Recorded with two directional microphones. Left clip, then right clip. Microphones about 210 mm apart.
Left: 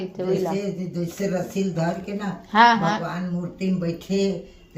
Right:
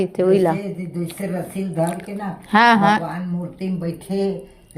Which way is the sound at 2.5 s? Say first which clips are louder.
Right 3 dB; 35° right (ahead or behind).